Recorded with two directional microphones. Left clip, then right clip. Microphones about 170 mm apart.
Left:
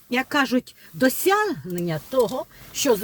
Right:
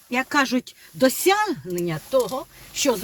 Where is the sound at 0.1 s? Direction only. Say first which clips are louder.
Even; 15° left (ahead or behind).